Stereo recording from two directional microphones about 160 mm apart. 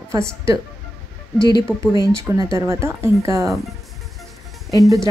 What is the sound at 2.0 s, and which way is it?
Speech, 20° right (ahead or behind).